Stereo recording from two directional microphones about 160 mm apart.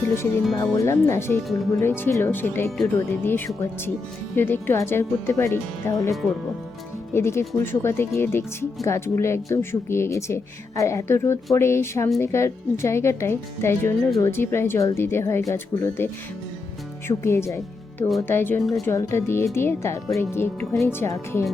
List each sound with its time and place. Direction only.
0.0 s speech: 15° left (ahead or behind)
17.1 s speech: 15° left (ahead or behind)